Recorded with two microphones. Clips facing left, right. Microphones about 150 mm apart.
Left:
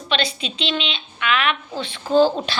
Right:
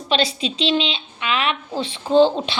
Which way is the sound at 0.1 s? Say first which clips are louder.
Right 3 dB; 35° right (ahead or behind).